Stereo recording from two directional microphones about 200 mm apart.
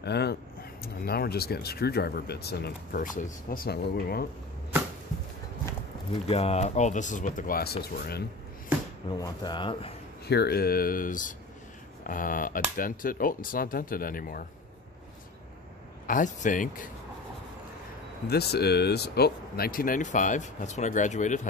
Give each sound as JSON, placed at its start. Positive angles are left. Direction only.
{"t": 0.0, "sound": "speech", "side_deg": 55}
{"t": 6.2, "sound": "speech", "side_deg": 30}
{"t": 9.2, "sound": "speech", "side_deg": 20}
{"t": 10.2, "sound": "speech", "side_deg": 55}
{"t": 16.1, "sound": "speech", "side_deg": 40}
{"t": 18.2, "sound": "speech", "side_deg": 55}